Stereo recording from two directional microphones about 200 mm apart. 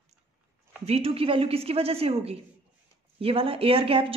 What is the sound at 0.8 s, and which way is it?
A woman's voice, 30° right (ahead or behind).